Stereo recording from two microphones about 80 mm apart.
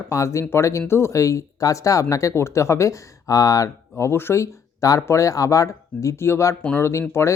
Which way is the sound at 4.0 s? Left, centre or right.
Left.